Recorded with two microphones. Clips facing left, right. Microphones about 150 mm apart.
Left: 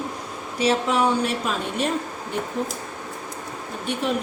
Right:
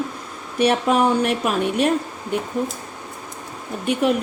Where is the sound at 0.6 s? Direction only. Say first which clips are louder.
Right 3 dB; 60° right (ahead or behind).